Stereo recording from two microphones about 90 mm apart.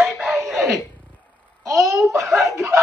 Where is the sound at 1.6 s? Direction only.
35° right (ahead or behind).